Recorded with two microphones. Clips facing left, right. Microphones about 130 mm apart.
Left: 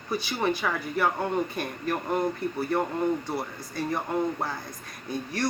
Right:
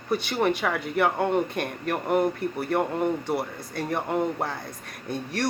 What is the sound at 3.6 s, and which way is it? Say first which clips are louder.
Speech: right 1 dB; 60° right (ahead or behind).